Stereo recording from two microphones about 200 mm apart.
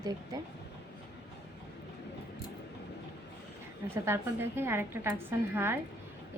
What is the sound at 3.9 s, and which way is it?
Speech, 10° right (ahead or behind).